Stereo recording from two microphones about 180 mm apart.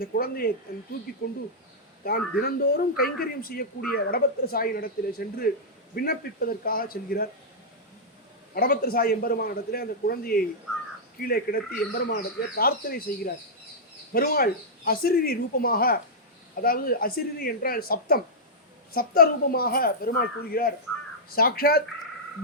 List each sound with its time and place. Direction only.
0.0 s speech: 55° left (ahead or behind)
8.5 s speech: 55° left (ahead or behind)